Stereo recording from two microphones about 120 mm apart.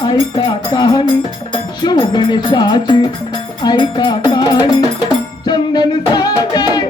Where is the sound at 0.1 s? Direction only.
40° left (ahead or behind).